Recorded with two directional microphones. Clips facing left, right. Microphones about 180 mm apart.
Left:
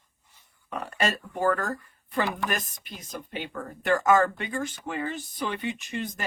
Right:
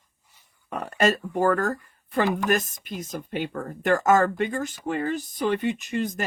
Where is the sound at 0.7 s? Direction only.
45° right (ahead or behind).